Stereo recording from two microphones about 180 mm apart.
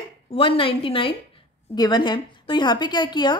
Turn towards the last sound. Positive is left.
turn(degrees=25)  # may be behind; listen again after turning